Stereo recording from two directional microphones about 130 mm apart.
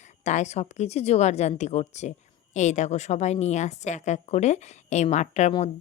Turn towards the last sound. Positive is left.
turn(degrees=60)  # may be behind; listen again after turning